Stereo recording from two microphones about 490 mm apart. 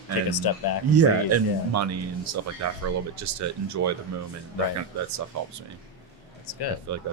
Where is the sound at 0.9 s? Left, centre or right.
Right.